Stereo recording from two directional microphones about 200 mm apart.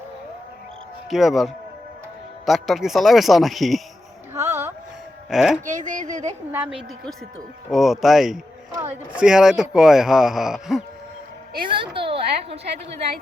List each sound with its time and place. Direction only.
1.1 s speech: centre (ahead or behind)
2.5 s speech: centre (ahead or behind)
4.4 s a sound: 15° right (ahead or behind)
5.3 s speech: centre (ahead or behind)
5.6 s speech: 40° right (ahead or behind)
6.5 s speech: 5° right (ahead or behind)
11.7 s a sound: 25° right (ahead or behind)